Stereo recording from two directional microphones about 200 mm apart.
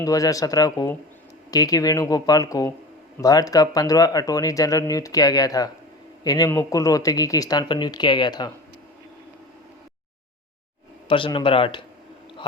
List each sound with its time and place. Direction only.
0.0 s speech: 15° left (ahead or behind)
11.1 s speech: 25° left (ahead or behind)